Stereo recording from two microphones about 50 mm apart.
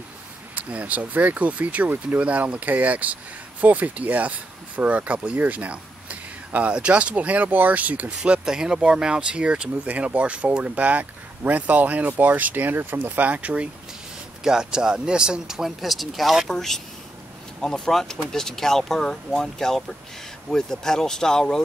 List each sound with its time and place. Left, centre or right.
0.6 s speech: right
8.2 s speech: centre; by 13.0 s right
13.0 s speech: right
14.4 s speech: centre